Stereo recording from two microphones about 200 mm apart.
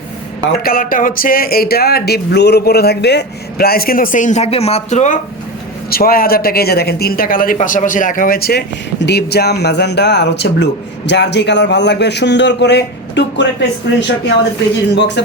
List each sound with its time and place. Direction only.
0.4 s speech: 45° left (ahead or behind)
5.9 s a man's voice: 50° left (ahead or behind)